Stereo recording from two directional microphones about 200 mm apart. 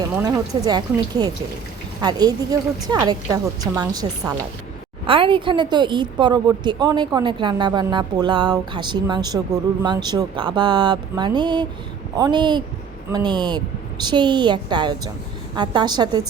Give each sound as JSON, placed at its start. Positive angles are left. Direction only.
{"t": 0.2, "sound": "a woman's voice", "side_deg": -20}